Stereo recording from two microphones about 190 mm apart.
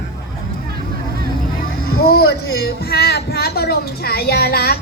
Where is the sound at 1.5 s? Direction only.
50° left (ahead or behind).